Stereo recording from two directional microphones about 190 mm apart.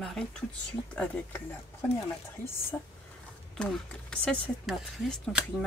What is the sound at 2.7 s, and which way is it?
Speech, 5° left (ahead or behind).